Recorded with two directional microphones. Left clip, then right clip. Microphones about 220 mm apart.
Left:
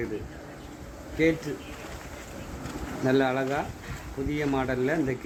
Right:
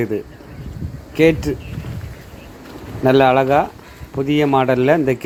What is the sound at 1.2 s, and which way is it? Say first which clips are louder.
Speech: right 11 dB; 35° right (ahead or behind).